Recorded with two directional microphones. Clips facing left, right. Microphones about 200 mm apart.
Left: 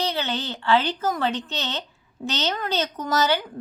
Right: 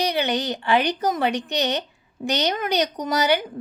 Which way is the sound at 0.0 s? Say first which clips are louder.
Right 4 dB; 15° right (ahead or behind).